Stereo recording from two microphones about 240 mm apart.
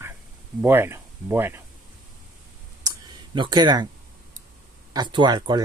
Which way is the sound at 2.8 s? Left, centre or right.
Centre.